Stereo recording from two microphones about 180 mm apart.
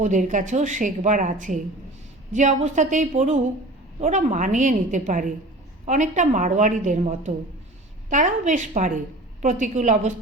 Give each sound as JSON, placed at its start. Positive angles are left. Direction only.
{"t": 0.0, "sound": "a woman's voice", "side_deg": -45}